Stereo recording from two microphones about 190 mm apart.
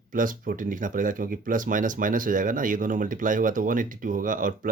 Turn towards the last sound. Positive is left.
turn(degrees=-45)  # may be behind; listen again after turning